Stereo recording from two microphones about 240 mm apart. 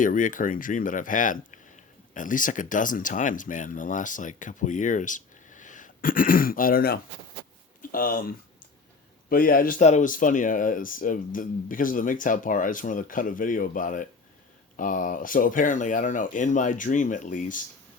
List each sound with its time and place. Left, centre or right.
0.0 s speech: left